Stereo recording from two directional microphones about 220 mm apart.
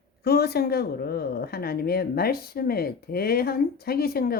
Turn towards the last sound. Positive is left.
turn(degrees=45)  # may be behind; listen again after turning